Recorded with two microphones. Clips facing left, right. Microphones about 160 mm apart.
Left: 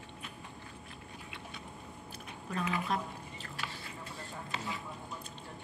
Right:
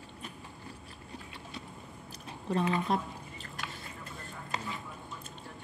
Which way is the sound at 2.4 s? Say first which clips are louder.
Right 5 dB; 30° right (ahead or behind).